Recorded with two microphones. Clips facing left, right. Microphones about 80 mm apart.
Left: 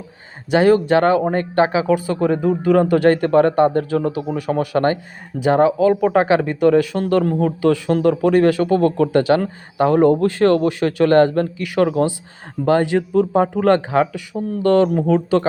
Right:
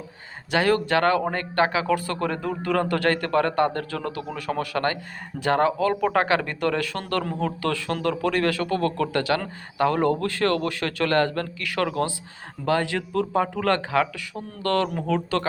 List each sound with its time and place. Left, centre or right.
0.5 s a man's voice: left